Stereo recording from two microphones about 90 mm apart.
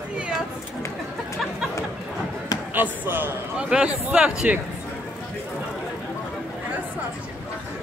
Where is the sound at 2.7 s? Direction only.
20° right (ahead or behind).